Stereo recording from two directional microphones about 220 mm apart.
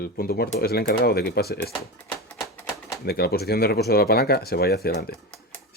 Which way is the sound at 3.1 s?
45° left (ahead or behind).